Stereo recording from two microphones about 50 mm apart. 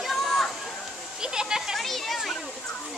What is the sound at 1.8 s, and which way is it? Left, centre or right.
Speech, centre.